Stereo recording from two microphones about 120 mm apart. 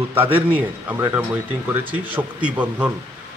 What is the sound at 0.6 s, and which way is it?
A man's voice, 15° right (ahead or behind).